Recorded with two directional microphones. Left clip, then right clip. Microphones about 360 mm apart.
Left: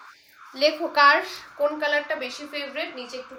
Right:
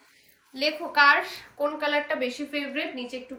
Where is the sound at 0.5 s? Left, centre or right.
Left.